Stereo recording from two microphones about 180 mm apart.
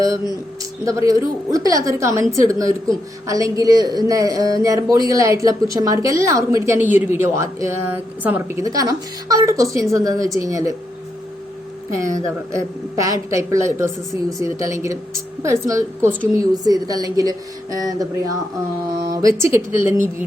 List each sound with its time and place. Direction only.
0.6 s a woman's voice: 20° right (ahead or behind)
11.9 s a woman's voice: 15° right (ahead or behind)